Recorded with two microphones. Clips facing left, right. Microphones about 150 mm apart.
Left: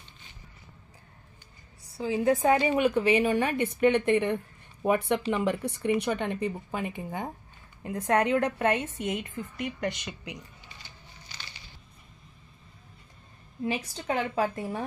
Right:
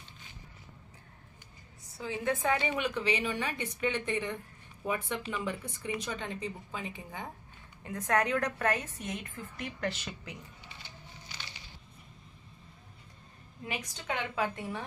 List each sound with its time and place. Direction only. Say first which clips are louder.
1.9 s a woman's voice: left 8 dB; 30° left (ahead or behind)
7.8 s a woman's voice: left 4 dB; 30° left (ahead or behind)
13.7 s a woman's voice: left 7 dB; 30° left (ahead or behind)